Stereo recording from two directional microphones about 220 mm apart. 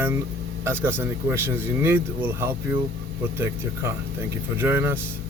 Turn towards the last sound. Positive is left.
turn(degrees=-10)  # may be behind; listen again after turning